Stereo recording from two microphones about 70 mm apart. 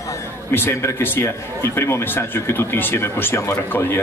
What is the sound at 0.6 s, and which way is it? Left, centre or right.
A man's voice, left.